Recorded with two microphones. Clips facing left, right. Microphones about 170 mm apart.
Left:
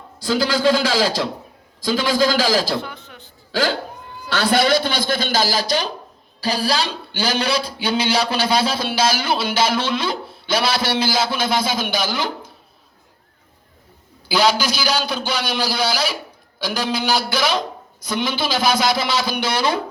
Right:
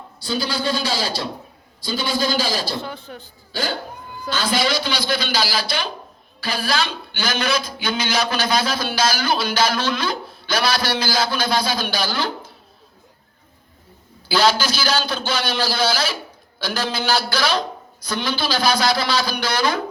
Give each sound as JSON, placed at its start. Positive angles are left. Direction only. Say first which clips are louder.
{"t": 0.2, "sound": "a man's voice", "louder": "left 6 dB", "side_deg": 90}
{"t": 2.8, "sound": "a sound", "louder": "right 3 dB", "side_deg": -35}
{"t": 3.5, "sound": "speech", "louder": "left 5 dB", "side_deg": 90}
{"t": 4.3, "sound": "a man's voice", "louder": "left 4 dB", "side_deg": 65}
{"t": 14.3, "sound": "a man's voice", "louder": "even", "side_deg": 15}